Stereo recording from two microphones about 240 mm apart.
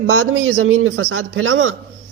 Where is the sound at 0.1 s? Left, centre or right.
Right.